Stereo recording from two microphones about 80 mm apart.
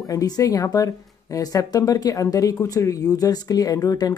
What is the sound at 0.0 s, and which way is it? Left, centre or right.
Speech, left.